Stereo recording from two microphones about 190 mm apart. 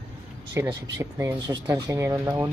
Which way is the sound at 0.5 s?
15° right (ahead or behind).